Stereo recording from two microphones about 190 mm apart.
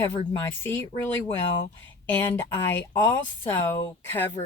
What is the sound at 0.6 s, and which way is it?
Speech, 10° left (ahead or behind).